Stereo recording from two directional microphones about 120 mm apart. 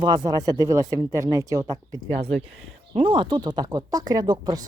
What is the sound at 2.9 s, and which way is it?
Speech, 45° right (ahead or behind).